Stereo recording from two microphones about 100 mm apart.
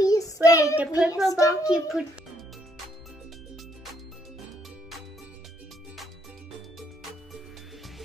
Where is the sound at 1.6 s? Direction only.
5° right (ahead or behind).